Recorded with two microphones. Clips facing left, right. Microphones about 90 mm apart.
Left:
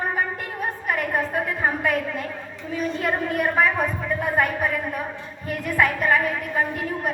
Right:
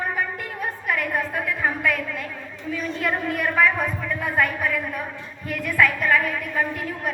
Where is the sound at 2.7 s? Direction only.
45° left (ahead or behind).